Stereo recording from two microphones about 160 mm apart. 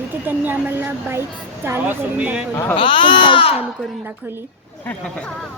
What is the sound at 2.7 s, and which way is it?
Speech, 30° left (ahead or behind).